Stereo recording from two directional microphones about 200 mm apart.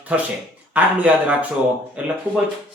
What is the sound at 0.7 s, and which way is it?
Speech, 5° right (ahead or behind).